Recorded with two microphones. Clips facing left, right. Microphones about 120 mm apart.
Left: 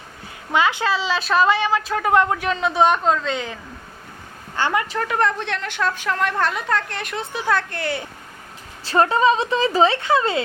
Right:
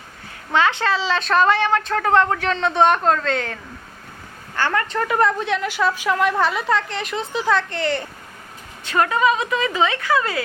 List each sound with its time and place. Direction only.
0.5 s a woman's voice: 10° left (ahead or behind)
4.5 s a woman's voice: 15° left (ahead or behind)
4.9 s a woman's voice: centre (ahead or behind)
8.8 s a woman's voice: 30° left (ahead or behind)